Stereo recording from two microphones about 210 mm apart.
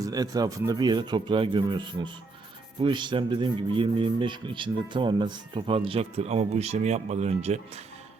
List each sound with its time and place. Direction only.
0.0 s speech: 20° right (ahead or behind)